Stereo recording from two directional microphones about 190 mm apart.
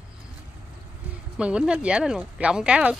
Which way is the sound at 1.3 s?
5° right (ahead or behind).